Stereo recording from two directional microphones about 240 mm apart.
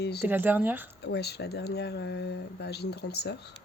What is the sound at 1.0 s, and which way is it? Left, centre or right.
Speech, left.